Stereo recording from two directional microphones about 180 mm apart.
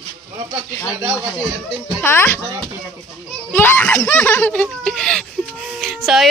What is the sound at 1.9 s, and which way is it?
Speech, 10° left (ahead or behind).